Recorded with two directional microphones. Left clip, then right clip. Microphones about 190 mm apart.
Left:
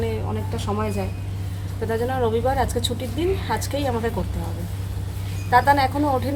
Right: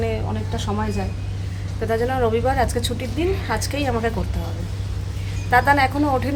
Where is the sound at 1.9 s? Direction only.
15° right (ahead or behind).